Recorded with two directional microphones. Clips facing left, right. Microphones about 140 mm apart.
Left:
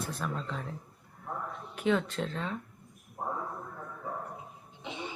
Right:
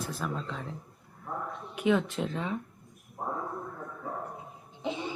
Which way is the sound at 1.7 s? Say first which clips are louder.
Right 2 dB; 10° right (ahead or behind).